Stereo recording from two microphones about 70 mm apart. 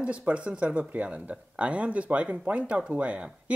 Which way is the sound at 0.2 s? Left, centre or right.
Centre.